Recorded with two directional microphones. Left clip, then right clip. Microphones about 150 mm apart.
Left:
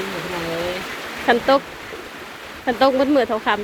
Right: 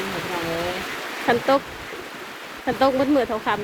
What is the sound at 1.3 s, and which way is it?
Speech, 10° right (ahead or behind).